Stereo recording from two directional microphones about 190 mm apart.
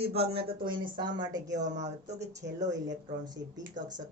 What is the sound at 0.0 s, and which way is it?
Speech, 30° right (ahead or behind).